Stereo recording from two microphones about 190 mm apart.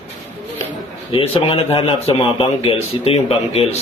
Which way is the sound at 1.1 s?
30° left (ahead or behind).